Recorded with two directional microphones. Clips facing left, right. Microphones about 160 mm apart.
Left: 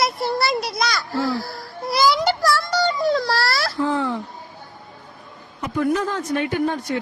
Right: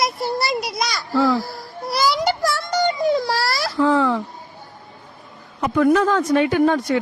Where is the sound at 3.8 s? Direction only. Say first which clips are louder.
Right 6 dB; 90° right.